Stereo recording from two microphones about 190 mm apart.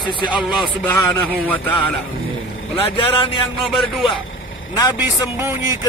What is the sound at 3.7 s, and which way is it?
Speech, centre (ahead or behind).